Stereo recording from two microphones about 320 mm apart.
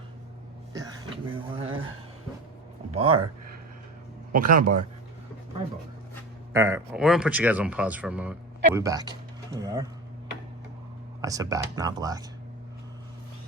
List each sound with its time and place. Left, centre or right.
1.5 s a sound: centre
2.9 s speech: centre
4.4 s a man's voice: right
6.5 s speech: centre
11.2 s speech: centre